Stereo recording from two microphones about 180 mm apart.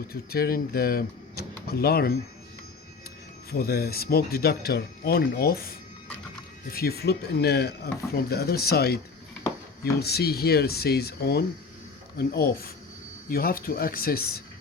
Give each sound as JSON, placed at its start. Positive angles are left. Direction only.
{"t": 0.1, "sound": "speech", "side_deg": 55}
{"t": 3.5, "sound": "speech", "side_deg": 60}
{"t": 10.0, "sound": "speech", "side_deg": 60}